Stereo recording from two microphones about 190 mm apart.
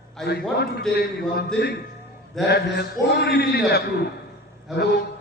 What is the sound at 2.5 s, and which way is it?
A man's voice, 60° left (ahead or behind).